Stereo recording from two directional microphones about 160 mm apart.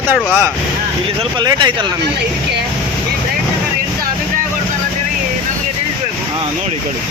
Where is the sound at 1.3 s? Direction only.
30° right (ahead or behind).